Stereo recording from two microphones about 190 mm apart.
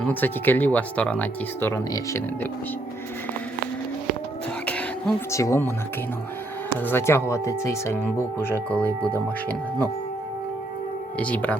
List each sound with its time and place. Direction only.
0.0 s speech: 10° left (ahead or behind)
4.6 s a sound: 5° left (ahead or behind)
5.4 s speech: 15° left (ahead or behind)
6.8 s speech: 15° left (ahead or behind)
11.2 s speech: 5° left (ahead or behind)